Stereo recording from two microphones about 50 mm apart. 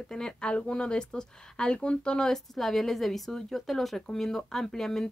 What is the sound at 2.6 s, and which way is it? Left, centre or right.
A woman's voice, centre.